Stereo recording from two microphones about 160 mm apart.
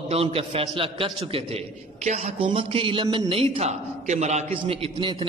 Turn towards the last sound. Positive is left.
turn(degrees=-30)  # may be behind; listen again after turning